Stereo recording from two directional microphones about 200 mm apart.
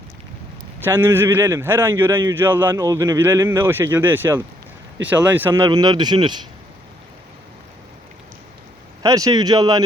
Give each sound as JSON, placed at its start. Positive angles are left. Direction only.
{"t": 0.9, "sound": "speech", "side_deg": -10}
{"t": 9.0, "sound": "speech", "side_deg": -15}